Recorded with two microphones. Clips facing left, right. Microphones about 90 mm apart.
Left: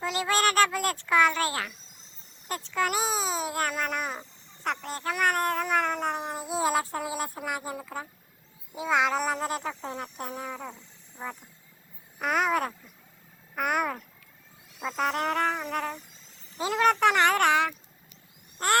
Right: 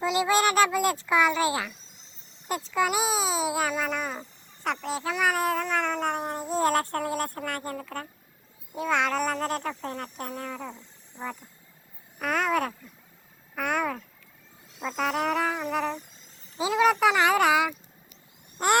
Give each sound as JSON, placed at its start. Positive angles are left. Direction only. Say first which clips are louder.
{"t": 0.0, "sound": "a sound", "louder": "right 3 dB", "side_deg": -5}
{"t": 4.6, "sound": "cat", "louder": "right 2 dB", "side_deg": 0}
{"t": 8.7, "sound": "speech", "louder": "even", "side_deg": 5}
{"t": 14.8, "sound": "a sound", "louder": "even", "side_deg": 10}
{"t": 15.1, "sound": "speech", "louder": "right 3 dB", "side_deg": -5}
{"t": 18.5, "sound": "vehicle", "louder": "right 2 dB", "side_deg": -15}